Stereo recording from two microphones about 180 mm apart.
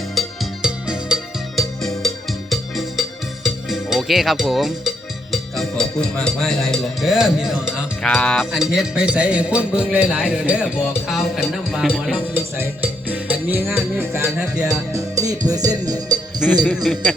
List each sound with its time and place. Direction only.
0.1 s music: centre (ahead or behind)
9.9 s speech: 5° right (ahead or behind)
12.3 s music: 10° right (ahead or behind)
14.2 s speech: 10° right (ahead or behind)
14.9 s music: 20° right (ahead or behind)
15.4 s speech: 20° right (ahead or behind)
16.7 s speech: centre (ahead or behind)